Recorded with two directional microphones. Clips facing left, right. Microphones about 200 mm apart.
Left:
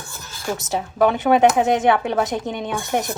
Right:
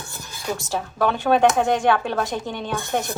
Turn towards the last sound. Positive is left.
turn(degrees=20)  # may be behind; listen again after turning